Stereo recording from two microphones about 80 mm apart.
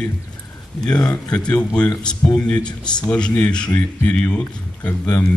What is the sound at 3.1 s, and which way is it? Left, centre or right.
Speech, centre.